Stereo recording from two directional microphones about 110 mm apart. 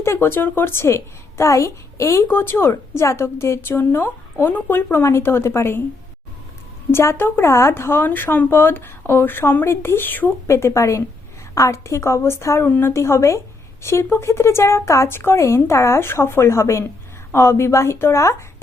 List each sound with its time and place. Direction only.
0.0 s speech: 20° left (ahead or behind)
6.9 s speech: 25° left (ahead or behind)